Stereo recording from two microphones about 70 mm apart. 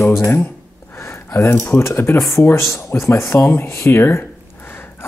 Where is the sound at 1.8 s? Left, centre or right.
Left.